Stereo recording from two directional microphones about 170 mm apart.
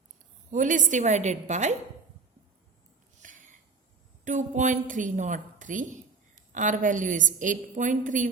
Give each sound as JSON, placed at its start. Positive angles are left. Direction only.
{"t": 0.5, "sound": "a woman's voice", "side_deg": -50}
{"t": 3.2, "sound": "a sound", "side_deg": -45}
{"t": 4.2, "sound": "a woman's voice", "side_deg": -45}